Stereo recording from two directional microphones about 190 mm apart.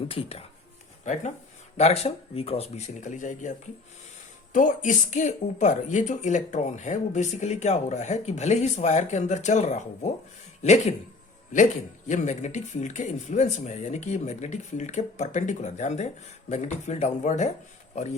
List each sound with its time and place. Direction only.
0.1 s speech: 30° left (ahead or behind)
4.5 s speech: 40° left (ahead or behind)
12.0 s speech: 40° left (ahead or behind)